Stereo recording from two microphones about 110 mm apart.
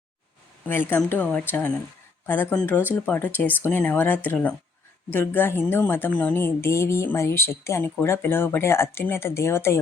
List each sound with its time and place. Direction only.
0.6 s speech: 20° left (ahead or behind)